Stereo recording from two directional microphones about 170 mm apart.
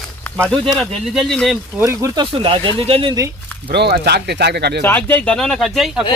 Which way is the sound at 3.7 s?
70° right (ahead or behind).